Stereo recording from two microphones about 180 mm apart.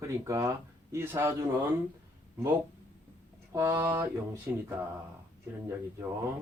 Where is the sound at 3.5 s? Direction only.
10° right (ahead or behind).